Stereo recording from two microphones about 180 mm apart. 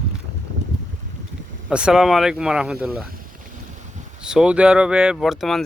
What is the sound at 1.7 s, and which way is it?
Speech, 5° right (ahead or behind).